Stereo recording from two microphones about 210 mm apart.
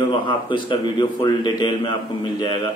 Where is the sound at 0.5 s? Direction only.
20° left (ahead or behind).